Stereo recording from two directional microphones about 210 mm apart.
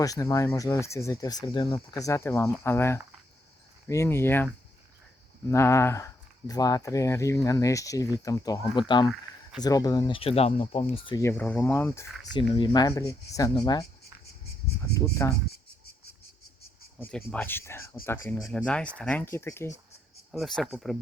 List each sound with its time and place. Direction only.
0.0 s speech: 15° left (ahead or behind)
14.9 s speech: 15° left (ahead or behind)
17.0 s speech: 5° left (ahead or behind)
20.3 s speech: centre (ahead or behind)